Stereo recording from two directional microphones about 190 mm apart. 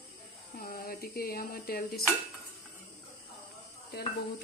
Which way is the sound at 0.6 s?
50° left (ahead or behind).